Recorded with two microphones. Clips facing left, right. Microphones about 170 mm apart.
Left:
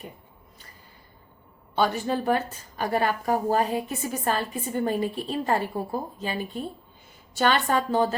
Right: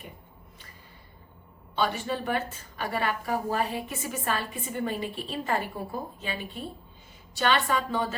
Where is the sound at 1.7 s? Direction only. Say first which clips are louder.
Left 4 dB; 45° left (ahead or behind).